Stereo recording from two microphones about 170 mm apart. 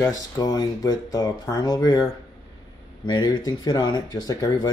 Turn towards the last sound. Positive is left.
turn(degrees=20)  # may be behind; listen again after turning